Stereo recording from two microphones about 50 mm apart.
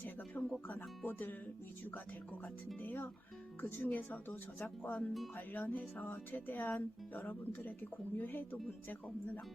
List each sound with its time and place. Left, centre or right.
0.0 s music: left
0.8 s speech: left
2.7 s speech: left